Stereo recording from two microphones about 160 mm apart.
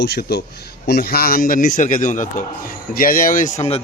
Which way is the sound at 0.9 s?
70° left (ahead or behind).